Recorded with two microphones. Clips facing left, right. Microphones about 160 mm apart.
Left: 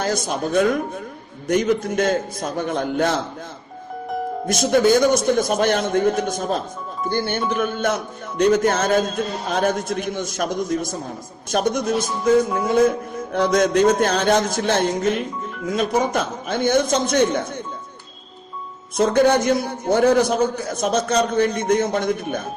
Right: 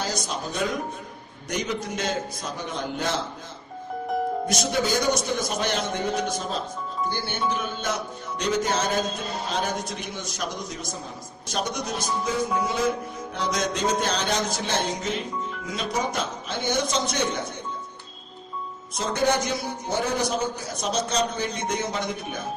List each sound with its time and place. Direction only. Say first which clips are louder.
0.0 s speech: left 7 dB; 55° left (ahead or behind)
4.4 s speech: left 8 dB; 50° left (ahead or behind)
18.9 s speech: left 8 dB; 55° left (ahead or behind)